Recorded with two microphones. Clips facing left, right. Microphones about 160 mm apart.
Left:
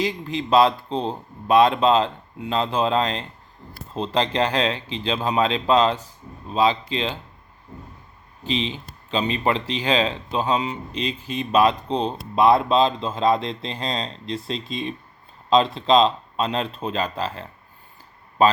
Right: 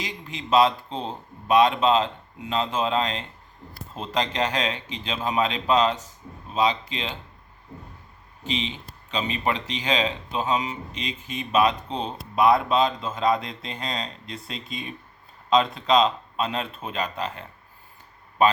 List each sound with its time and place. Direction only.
0.0 s speech: 35° left (ahead or behind)
8.4 s speech: 35° left (ahead or behind)